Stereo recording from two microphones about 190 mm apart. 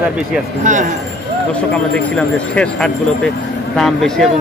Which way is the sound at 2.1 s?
5° left (ahead or behind).